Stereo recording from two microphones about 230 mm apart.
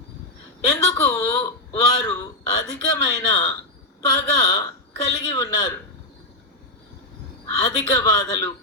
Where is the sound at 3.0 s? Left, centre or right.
Centre.